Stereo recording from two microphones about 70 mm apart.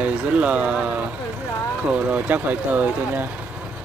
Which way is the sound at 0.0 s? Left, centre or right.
Centre.